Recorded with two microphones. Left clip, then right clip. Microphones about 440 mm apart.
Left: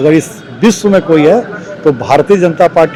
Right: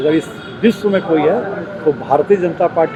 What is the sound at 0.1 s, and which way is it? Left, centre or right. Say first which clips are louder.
Speech: left 6 dB; left.